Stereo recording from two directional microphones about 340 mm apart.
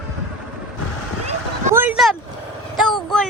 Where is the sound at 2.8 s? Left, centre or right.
Centre.